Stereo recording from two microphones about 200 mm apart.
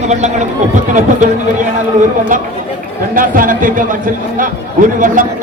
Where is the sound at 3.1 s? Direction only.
45° right (ahead or behind).